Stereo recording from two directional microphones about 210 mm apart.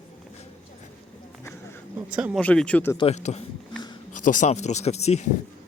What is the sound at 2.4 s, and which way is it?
Speech, 5° left (ahead or behind).